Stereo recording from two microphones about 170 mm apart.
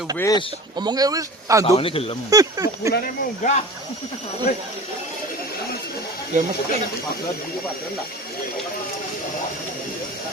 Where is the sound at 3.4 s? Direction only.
50° left (ahead or behind).